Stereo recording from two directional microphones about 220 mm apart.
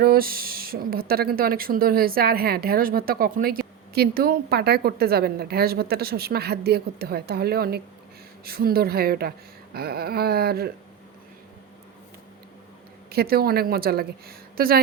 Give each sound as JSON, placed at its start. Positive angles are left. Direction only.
{"t": 0.0, "sound": "speech", "side_deg": -40}
{"t": 13.1, "sound": "speech", "side_deg": -45}